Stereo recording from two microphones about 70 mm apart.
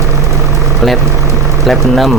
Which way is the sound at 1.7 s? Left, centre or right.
Centre.